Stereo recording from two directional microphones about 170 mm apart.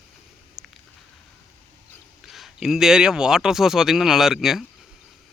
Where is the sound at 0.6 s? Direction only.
Centre (ahead or behind).